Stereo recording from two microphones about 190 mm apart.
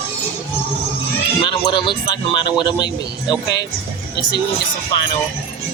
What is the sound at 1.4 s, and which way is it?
Speech, 25° left (ahead or behind).